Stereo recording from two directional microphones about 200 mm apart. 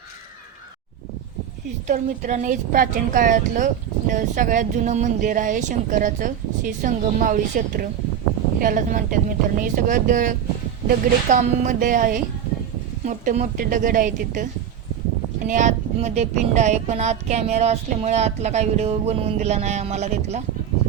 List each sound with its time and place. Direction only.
1.9 s speech: 40° right (ahead or behind)
15.4 s speech: 40° right (ahead or behind)